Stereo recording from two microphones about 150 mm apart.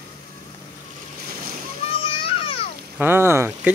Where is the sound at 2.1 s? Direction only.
35° left (ahead or behind).